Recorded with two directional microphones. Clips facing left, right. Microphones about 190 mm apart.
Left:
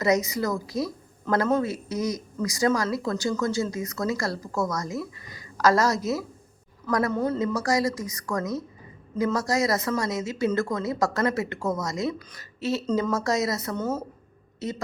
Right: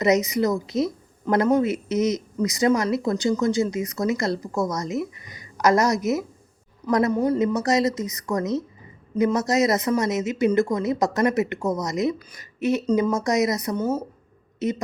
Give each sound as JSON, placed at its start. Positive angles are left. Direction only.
{"t": 0.0, "sound": "a woman's voice", "side_deg": -20}